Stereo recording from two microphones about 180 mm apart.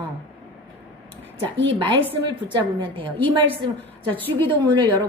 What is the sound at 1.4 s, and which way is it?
Speech, 80° right.